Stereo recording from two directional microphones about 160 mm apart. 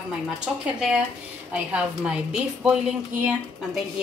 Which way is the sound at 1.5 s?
5° right (ahead or behind).